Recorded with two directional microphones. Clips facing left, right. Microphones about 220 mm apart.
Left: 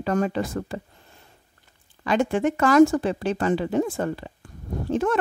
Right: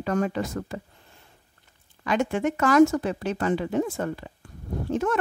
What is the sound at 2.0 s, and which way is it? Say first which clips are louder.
A woman's voice: left 3 dB; 30° left (ahead or behind).